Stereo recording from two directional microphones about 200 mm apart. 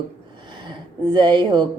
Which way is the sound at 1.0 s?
20° right (ahead or behind).